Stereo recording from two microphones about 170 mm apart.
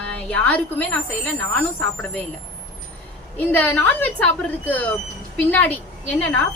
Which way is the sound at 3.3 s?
10° left (ahead or behind).